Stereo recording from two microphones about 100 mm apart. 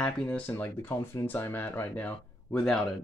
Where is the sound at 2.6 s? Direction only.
5° left (ahead or behind).